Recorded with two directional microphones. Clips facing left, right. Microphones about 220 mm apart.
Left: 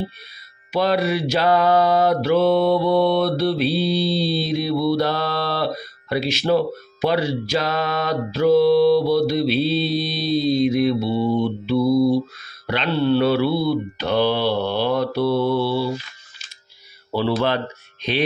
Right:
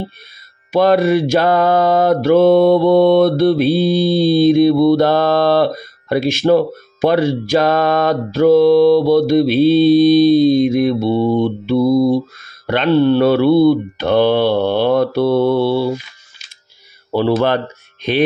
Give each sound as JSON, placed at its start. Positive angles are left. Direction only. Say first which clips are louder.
{"t": 0.7, "sound": "mantra", "louder": "right 7 dB", "side_deg": -50}
{"t": 17.1, "sound": "mantra", "louder": "right 6 dB", "side_deg": -50}